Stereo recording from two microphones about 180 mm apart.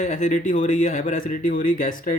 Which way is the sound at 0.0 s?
40° left (ahead or behind).